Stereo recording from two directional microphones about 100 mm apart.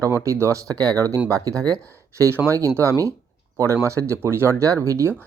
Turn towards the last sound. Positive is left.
turn(degrees=-30)  # may be behind; listen again after turning